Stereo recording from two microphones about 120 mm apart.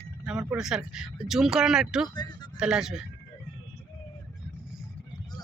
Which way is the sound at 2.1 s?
35° left (ahead or behind).